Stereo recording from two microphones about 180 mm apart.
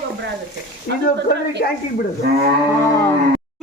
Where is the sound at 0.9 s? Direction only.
55° left (ahead or behind).